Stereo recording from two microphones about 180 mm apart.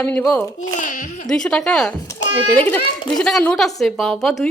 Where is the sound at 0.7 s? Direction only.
45° left (ahead or behind).